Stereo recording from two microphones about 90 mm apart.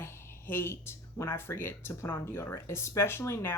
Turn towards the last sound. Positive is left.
turn(degrees=25)  # may be behind; listen again after turning